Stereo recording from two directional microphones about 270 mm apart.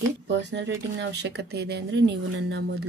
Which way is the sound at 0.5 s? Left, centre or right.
Right.